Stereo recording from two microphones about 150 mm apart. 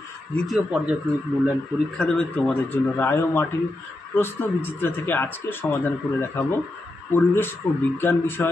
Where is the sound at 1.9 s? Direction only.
5° left (ahead or behind).